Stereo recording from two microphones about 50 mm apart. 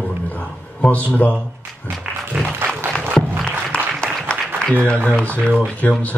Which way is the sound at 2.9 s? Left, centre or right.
Centre.